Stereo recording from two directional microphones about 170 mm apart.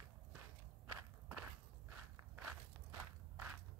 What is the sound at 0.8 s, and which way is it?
Walk, 10° right (ahead or behind).